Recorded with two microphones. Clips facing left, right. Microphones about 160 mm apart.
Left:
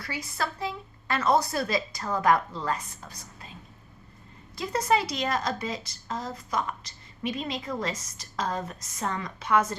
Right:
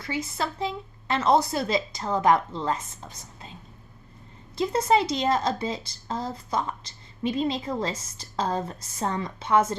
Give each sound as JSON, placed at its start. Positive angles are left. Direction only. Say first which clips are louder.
{"t": 0.0, "sound": "speech", "louder": "right 3 dB", "side_deg": -25}
{"t": 4.5, "sound": "speech", "louder": "right 4 dB", "side_deg": -25}